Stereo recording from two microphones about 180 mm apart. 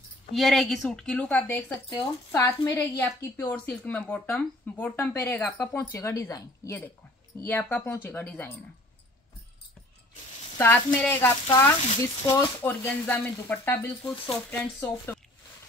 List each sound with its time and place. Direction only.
0.3 s a woman's voice: centre (ahead or behind)
1.9 s speech: 15° left (ahead or behind)
3.5 s speech: 5° left (ahead or behind)
10.6 s speech: 10° left (ahead or behind)